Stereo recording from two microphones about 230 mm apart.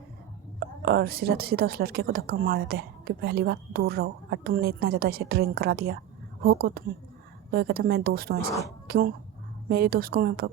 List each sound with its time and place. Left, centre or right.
0.9 s a woman's voice: right